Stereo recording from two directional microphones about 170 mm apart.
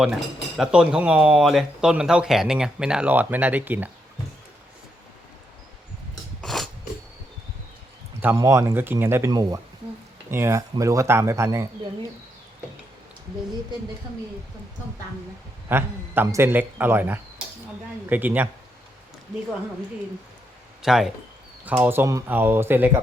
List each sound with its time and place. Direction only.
0.5 s speech: 5° right (ahead or behind)
6.4 s a sound: centre (ahead or behind)
8.2 s a man's voice: 15° right (ahead or behind)
15.7 s a man's voice: 15° right (ahead or behind)
20.8 s a man's voice: centre (ahead or behind)